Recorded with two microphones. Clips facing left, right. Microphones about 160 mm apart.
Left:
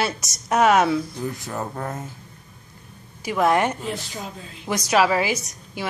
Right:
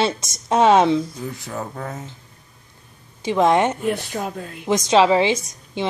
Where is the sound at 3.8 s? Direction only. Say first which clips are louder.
Right 7 dB; 60° right (ahead or behind).